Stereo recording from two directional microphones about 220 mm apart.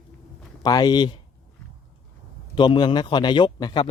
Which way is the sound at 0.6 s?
20° left (ahead or behind).